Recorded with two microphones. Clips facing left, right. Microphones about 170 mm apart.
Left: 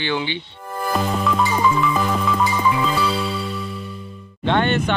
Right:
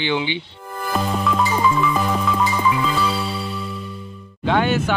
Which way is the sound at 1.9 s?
5° right (ahead or behind).